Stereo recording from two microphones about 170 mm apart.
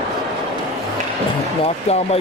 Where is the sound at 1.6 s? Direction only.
35° left (ahead or behind).